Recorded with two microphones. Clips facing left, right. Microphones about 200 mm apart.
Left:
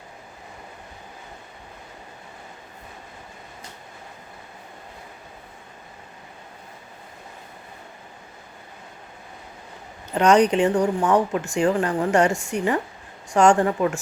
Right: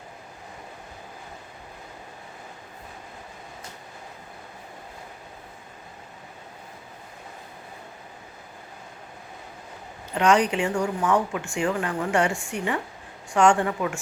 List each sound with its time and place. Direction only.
10.2 s speech: 40° left (ahead or behind)